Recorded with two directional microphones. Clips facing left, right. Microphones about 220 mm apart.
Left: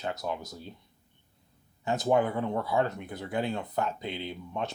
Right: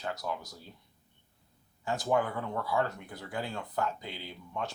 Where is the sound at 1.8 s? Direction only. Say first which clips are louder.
Left 4 dB; 20° left (ahead or behind).